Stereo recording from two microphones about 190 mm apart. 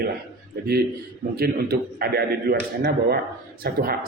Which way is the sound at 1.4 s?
55° right (ahead or behind).